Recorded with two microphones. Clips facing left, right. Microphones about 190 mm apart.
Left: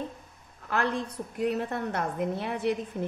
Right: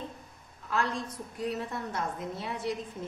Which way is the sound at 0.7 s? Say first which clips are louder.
Left 3 dB; 65° left (ahead or behind).